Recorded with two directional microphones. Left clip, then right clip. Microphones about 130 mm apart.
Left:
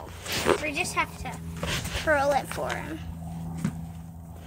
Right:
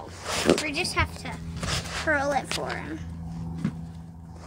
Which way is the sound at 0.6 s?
45° right (ahead or behind).